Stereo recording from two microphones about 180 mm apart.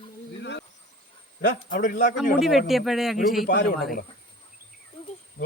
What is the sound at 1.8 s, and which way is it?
Speech, 45° left (ahead or behind).